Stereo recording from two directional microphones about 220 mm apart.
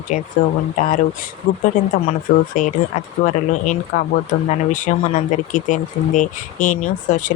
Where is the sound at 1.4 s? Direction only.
40° left (ahead or behind).